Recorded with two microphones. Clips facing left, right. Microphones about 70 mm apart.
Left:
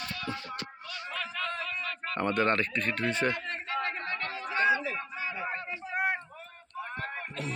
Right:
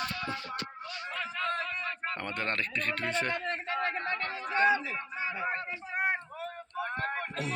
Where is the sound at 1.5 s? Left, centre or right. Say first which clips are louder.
Right 2 dB; right.